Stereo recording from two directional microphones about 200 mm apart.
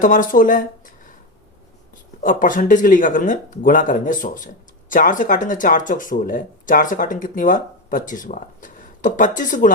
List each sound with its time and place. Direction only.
0.0 s speech: 40° left (ahead or behind)
2.2 s speech: 40° left (ahead or behind)